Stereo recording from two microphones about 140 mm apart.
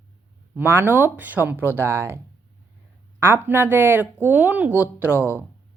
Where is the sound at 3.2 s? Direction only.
15° right (ahead or behind).